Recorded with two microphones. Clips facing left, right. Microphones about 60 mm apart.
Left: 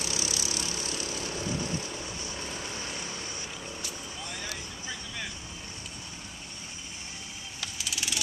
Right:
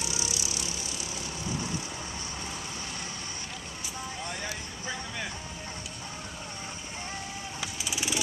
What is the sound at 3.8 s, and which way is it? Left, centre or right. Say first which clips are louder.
Vehicle: right 2 dB; right.